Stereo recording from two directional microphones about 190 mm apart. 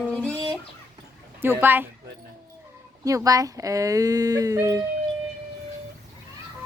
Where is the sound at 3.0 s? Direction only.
20° right (ahead or behind).